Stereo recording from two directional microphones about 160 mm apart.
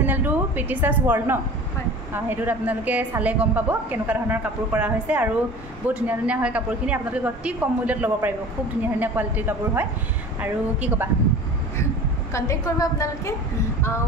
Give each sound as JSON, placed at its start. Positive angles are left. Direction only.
{"t": 0.0, "sound": "a woman's voice", "side_deg": -10}
{"t": 12.3, "sound": "a woman's voice", "side_deg": 20}